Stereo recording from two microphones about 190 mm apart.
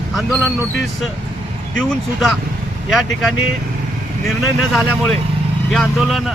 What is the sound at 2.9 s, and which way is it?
Speech, centre (ahead or behind).